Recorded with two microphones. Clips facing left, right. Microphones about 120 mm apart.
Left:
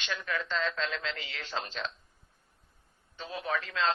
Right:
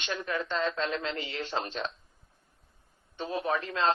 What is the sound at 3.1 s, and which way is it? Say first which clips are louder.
Speech: right 4 dB; 30° right (ahead or behind).